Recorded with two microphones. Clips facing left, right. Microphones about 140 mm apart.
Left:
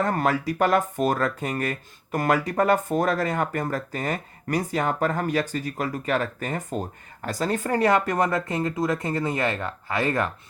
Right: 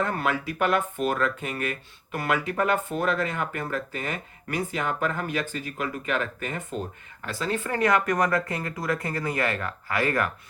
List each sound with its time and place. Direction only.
0.0 s speech: 40° left (ahead or behind); by 10.3 s 25° left (ahead or behind)